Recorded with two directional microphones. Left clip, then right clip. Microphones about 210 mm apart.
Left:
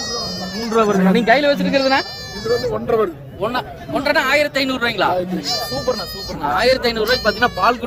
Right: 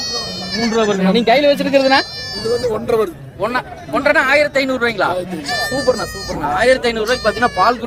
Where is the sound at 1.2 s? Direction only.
40° right (ahead or behind).